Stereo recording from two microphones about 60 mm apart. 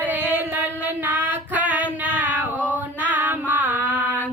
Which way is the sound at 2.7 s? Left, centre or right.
Right.